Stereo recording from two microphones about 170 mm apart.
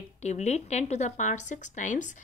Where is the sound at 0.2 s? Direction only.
40° left (ahead or behind).